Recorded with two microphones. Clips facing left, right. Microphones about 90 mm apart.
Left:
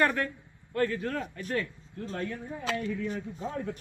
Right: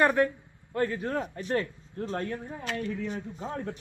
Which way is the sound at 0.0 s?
20° right (ahead or behind).